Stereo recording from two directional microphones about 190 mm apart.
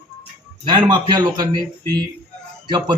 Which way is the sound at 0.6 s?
25° right (ahead or behind).